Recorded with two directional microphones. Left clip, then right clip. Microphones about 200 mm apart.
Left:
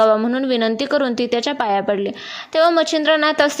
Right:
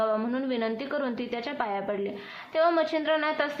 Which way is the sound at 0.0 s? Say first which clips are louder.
Left 12 dB; 40° left (ahead or behind).